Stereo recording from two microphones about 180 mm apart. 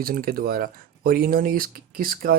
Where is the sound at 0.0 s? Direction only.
55° right (ahead or behind).